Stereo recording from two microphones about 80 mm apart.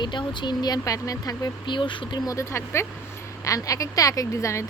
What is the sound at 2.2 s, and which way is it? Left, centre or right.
Speech, left.